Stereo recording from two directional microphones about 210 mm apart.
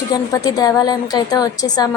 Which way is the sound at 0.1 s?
20° left (ahead or behind).